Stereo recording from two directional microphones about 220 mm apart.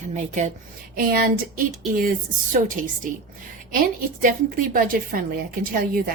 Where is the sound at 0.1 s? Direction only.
30° right (ahead or behind).